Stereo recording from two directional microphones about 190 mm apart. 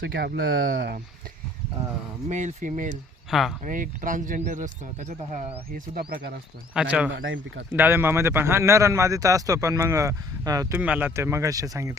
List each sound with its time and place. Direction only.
0.0 s speech: 55° right (ahead or behind)
2.3 s speech: 40° right (ahead or behind)
3.2 s speech: centre (ahead or behind)
3.6 s speech: 45° right (ahead or behind)
6.8 s speech: 5° right (ahead or behind)
7.2 s speech: 90° right
7.7 s a man's voice: 10° right (ahead or behind)